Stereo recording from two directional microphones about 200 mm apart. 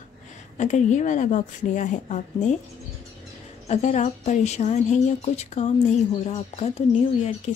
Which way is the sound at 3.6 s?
35° left (ahead or behind).